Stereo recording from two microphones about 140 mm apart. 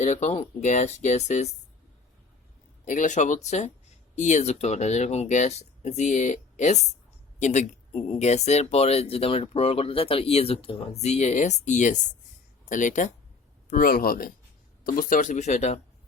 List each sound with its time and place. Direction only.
0.0 s speech: 55° left (ahead or behind)
2.8 s speech: 60° left (ahead or behind)
13.7 s speech: 85° left
14.8 s speech: 80° left; by 15.8 s 55° left (ahead or behind)